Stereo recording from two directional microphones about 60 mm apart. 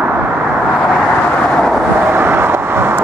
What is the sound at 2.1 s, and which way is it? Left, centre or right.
Vehicle, right.